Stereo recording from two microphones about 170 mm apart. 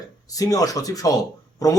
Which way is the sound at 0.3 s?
20° left (ahead or behind).